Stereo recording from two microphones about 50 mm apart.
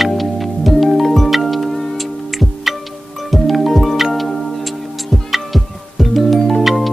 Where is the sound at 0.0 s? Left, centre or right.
Centre.